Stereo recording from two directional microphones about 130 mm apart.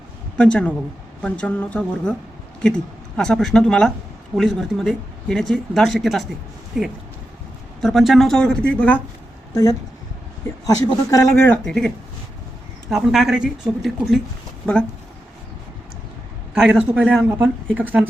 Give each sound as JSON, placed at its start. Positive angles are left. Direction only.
{"t": 0.3, "sound": "speech", "side_deg": 10}
{"t": 11.1, "sound": "speech", "side_deg": 20}
{"t": 11.6, "sound": "speech", "side_deg": 5}
{"t": 13.0, "sound": "speech", "side_deg": -5}
{"t": 14.6, "sound": "speech", "side_deg": 10}
{"t": 16.6, "sound": "speech", "side_deg": -10}